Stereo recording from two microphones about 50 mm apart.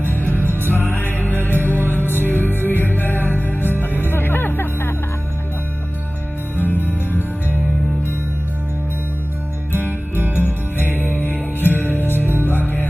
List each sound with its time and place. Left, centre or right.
0.2 s music: right
0.7 s music: left
6.5 s music: right
9.7 s music: right
11.1 s music: left